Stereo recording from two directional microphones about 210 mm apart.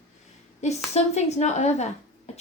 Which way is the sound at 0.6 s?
30° left (ahead or behind).